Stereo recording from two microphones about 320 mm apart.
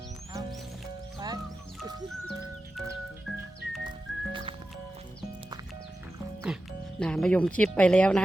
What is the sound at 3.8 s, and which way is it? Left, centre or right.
Music, centre.